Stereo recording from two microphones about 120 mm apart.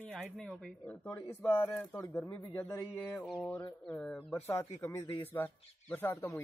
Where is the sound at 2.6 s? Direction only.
15° left (ahead or behind).